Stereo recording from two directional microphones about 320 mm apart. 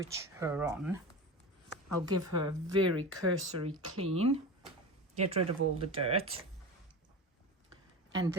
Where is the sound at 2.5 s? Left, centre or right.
Right.